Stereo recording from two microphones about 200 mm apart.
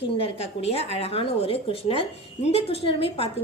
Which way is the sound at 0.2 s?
30° left (ahead or behind).